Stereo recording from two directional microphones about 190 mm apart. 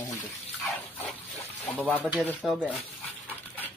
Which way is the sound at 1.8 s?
10° left (ahead or behind).